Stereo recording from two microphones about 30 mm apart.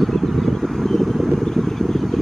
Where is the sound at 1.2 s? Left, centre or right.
Centre.